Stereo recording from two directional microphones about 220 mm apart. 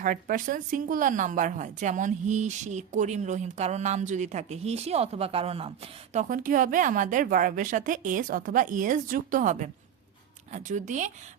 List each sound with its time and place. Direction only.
0.0 s speech: 40° right (ahead or behind)